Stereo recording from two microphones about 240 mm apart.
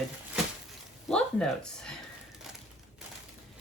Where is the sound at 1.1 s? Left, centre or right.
Centre.